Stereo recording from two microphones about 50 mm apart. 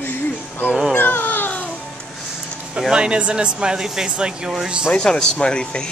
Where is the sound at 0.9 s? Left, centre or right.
Left.